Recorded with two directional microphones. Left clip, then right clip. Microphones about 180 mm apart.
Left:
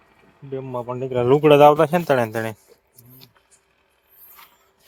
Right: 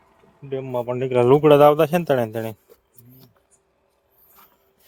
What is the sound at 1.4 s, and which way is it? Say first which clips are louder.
Speech: left 3 dB; 5° right (ahead or behind).